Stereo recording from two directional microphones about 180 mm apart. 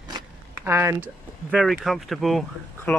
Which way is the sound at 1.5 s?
Centre (ahead or behind).